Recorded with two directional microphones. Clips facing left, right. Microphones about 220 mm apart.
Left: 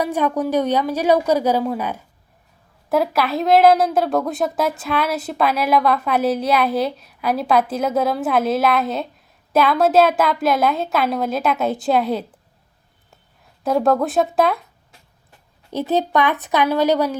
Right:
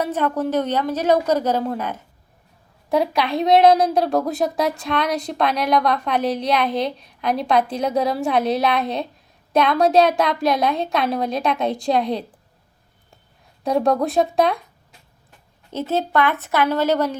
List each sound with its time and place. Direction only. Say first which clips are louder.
0.0 s a woman's voice: left 1 dB; 10° left (ahead or behind)
13.7 s speech: left 1 dB; centre (ahead or behind)
15.7 s a woman's voice: left 2 dB; 15° left (ahead or behind)